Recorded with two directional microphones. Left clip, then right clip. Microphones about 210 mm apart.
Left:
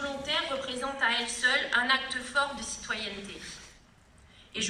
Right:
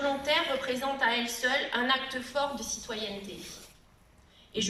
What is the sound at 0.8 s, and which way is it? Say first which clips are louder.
A woman's voice: left 2 dB; 25° right (ahead or behind).